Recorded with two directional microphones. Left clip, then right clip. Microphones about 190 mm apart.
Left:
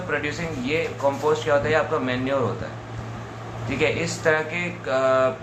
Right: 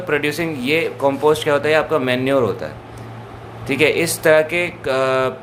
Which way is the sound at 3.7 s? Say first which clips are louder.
Right 7 dB; 65° right (ahead or behind).